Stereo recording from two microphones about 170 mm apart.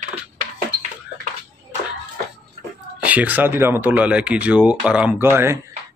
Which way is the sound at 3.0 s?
10° right (ahead or behind).